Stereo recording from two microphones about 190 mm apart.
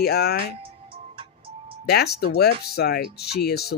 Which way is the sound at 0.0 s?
55° left (ahead or behind).